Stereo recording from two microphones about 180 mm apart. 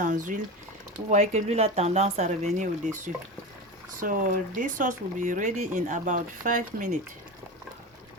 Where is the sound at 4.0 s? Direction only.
50° right (ahead or behind).